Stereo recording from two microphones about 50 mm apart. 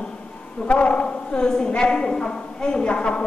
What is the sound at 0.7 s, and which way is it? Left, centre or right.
A woman's voice, left.